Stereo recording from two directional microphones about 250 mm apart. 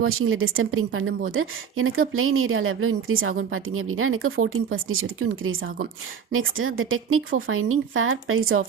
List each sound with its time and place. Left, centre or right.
0.0 s a woman's voice: right